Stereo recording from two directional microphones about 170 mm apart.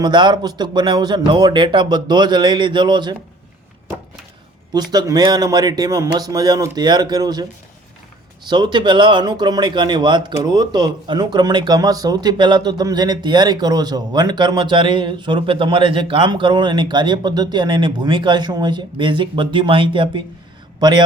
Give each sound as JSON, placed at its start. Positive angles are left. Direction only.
{"t": 0.0, "sound": "speech", "side_deg": -25}
{"t": 4.7, "sound": "speech", "side_deg": -25}
{"t": 8.4, "sound": "speech", "side_deg": -25}